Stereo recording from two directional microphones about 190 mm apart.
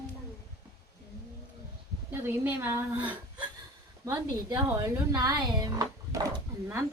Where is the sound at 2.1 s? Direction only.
10° right (ahead or behind).